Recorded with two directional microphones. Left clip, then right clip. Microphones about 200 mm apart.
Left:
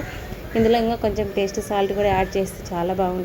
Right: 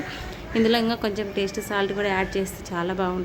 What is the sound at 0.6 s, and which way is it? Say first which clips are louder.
Speech: left 4 dB; 40° right (ahead or behind).